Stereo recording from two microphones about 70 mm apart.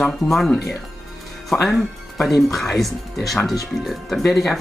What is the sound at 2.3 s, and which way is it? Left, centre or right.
Speech, left.